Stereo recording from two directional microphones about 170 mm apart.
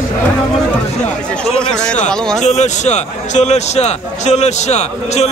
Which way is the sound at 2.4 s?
45° left (ahead or behind).